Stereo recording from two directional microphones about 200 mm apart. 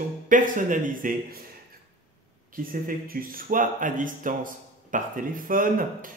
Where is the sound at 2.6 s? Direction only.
45° right (ahead or behind).